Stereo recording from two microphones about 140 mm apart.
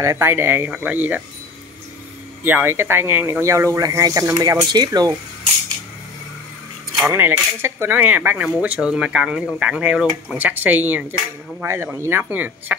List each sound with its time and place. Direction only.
0.0 s speech: 20° right (ahead or behind)
2.4 s speech: 15° right (ahead or behind)
7.1 s speech: 15° right (ahead or behind)